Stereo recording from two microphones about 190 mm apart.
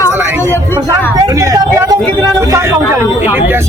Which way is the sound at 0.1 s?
10° right (ahead or behind).